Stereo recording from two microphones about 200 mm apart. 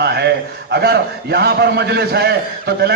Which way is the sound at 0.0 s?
55° right (ahead or behind).